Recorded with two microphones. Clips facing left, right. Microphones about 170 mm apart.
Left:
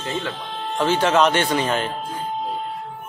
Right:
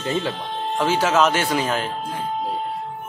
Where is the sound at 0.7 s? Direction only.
5° right (ahead or behind).